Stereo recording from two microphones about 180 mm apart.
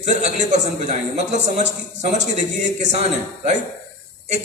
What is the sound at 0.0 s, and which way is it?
A man's voice, 40° right (ahead or behind).